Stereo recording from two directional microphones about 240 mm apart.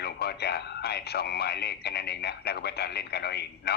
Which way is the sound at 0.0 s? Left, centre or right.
Left.